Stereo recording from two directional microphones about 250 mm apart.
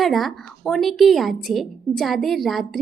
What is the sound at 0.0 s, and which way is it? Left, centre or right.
A woman's voice, centre.